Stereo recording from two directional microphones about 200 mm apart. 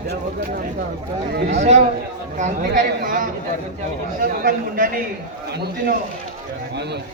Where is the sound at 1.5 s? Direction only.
35° right (ahead or behind).